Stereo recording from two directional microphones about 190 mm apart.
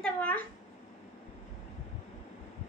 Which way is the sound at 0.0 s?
5° left (ahead or behind).